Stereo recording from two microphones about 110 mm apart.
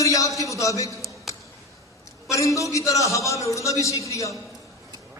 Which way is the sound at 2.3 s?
30° left (ahead or behind).